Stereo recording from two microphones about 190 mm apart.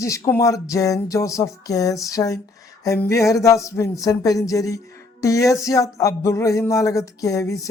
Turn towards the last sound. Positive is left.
turn(degrees=15)  # may be behind; listen again after turning